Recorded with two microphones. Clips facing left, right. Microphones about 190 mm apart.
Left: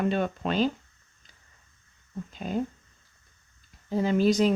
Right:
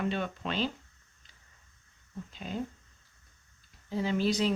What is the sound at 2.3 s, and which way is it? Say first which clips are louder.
Speech: left 8 dB; 50° left (ahead or behind).